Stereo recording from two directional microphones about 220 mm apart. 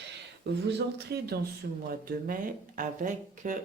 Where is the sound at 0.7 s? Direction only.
50° right (ahead or behind).